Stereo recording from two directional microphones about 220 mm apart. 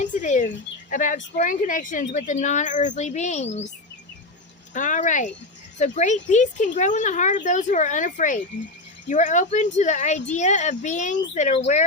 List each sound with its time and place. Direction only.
0.0 s speech: 35° left (ahead or behind)
4.7 s speech: 35° left (ahead or behind)